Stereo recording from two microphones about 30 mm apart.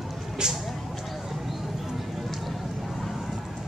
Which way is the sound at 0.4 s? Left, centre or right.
Right.